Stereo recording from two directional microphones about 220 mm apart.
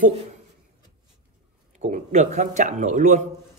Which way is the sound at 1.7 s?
35° right (ahead or behind).